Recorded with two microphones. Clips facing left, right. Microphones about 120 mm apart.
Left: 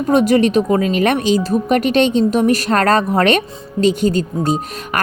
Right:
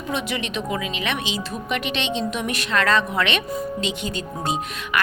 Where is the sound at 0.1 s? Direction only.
40° left (ahead or behind).